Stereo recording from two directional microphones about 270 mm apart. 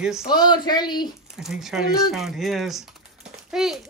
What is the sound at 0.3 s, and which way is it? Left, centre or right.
Speech, centre.